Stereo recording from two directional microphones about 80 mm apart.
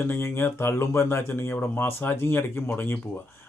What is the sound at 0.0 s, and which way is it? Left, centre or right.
Speech, left.